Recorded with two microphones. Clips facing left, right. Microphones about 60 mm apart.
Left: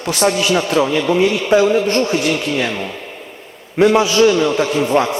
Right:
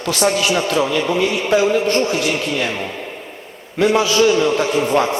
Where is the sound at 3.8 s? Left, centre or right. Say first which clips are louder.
Left 4 dB; left.